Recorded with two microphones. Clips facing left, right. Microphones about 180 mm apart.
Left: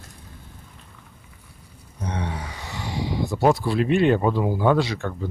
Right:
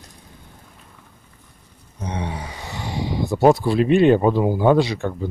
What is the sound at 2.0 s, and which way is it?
Speech, 15° right (ahead or behind).